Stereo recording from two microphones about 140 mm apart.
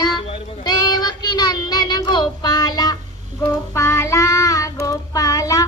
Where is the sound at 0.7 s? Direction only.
30° left (ahead or behind).